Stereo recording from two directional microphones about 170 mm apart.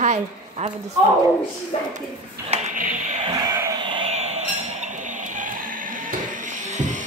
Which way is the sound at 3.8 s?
30° right (ahead or behind).